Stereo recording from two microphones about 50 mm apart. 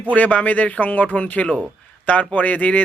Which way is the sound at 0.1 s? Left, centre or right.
Left.